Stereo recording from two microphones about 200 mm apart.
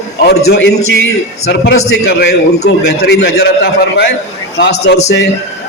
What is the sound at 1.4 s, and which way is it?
A man's voice, 55° left (ahead or behind).